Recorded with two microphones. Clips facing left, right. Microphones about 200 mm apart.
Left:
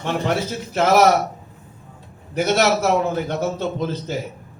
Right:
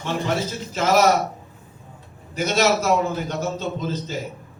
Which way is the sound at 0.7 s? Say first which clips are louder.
Left 3 dB; 60° left (ahead or behind).